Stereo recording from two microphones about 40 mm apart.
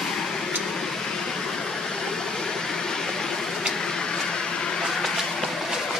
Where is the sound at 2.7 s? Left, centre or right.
Centre.